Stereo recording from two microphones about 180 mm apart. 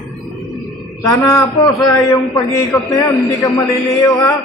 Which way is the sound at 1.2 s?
20° left (ahead or behind).